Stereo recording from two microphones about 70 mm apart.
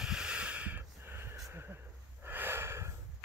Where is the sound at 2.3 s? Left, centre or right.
Right.